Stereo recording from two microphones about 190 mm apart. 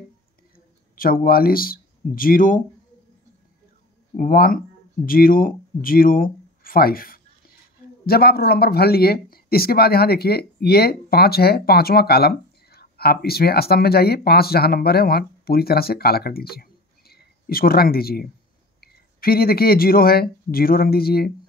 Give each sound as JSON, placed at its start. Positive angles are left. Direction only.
{"t": 0.9, "sound": "speech", "side_deg": 50}
{"t": 4.2, "sound": "speech", "side_deg": 50}